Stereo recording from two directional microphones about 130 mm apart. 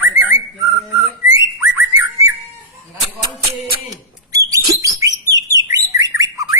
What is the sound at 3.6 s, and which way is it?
Bird, 25° right (ahead or behind).